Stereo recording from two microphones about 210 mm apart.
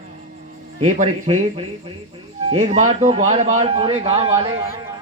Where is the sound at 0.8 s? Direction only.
35° right (ahead or behind).